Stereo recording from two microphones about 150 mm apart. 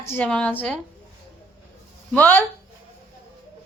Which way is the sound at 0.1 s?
10° left (ahead or behind).